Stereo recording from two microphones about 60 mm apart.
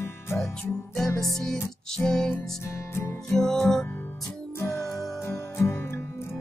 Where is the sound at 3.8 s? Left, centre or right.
Left.